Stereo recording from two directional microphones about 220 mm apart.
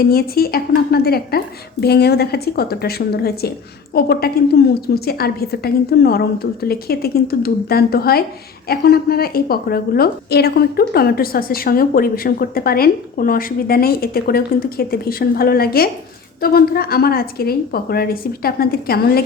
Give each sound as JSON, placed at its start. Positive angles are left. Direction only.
{"t": 0.0, "sound": "a woman's voice", "side_deg": 45}